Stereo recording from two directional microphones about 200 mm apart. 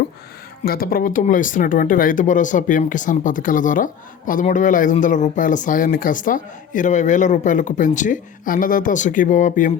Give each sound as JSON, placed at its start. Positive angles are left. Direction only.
{"t": 0.6, "sound": "speech", "side_deg": 50}